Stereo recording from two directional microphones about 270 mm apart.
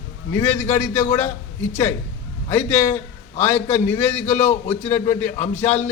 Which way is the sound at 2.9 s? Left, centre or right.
Left.